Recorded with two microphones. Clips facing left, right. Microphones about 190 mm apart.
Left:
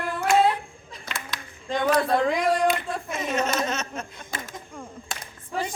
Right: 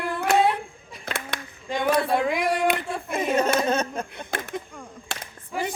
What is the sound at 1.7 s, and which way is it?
Female singing, 10° right (ahead or behind).